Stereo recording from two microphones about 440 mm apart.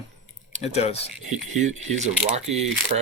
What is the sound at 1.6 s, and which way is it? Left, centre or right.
Speech, centre.